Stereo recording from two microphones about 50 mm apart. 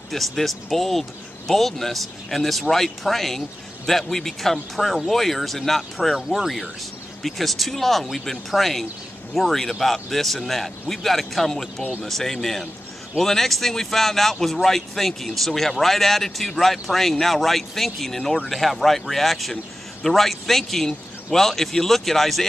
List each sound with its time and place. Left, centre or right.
0.1 s a man's voice: centre